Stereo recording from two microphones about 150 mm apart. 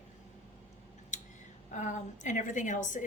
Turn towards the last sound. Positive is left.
turn(degrees=60)  # may be behind; listen again after turning